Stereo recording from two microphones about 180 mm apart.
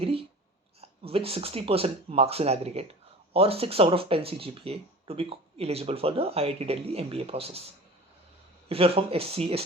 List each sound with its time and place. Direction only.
0.0 s a sound: 30° right (ahead or behind)
0.8 s speech: 30° right (ahead or behind)
8.7 s speech: 30° right (ahead or behind)